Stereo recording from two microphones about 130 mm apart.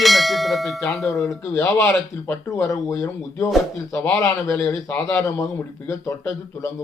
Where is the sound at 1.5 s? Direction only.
20° left (ahead or behind).